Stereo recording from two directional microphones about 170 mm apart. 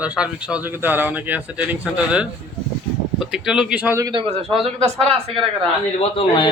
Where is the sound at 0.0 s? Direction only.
5° right (ahead or behind).